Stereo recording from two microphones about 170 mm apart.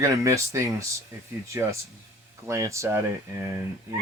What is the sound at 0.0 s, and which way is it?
Speech, 20° right (ahead or behind).